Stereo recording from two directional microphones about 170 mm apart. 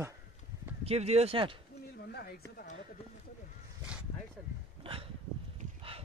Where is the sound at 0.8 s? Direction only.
40° right (ahead or behind).